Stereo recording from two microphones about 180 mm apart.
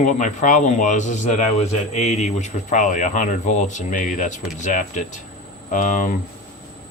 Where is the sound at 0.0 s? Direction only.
45° left (ahead or behind).